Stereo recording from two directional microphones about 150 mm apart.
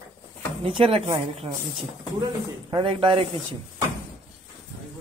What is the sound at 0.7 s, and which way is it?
Speech, 40° right (ahead or behind).